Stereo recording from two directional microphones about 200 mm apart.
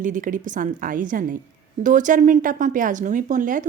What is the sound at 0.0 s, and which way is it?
Speech, 40° right (ahead or behind).